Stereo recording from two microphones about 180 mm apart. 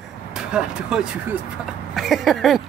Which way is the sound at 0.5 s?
5° right (ahead or behind).